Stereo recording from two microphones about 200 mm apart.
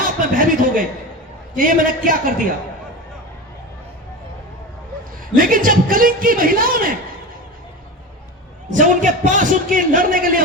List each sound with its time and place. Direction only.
0.0 s chuckle: 45° right (ahead or behind)
1.5 s a man's voice: 45° right (ahead or behind)
5.4 s a man's voice: 45° right (ahead or behind)
8.7 s a man's voice: 40° right (ahead or behind)